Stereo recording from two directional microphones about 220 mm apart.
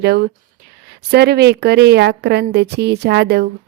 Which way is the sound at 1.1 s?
45° right (ahead or behind).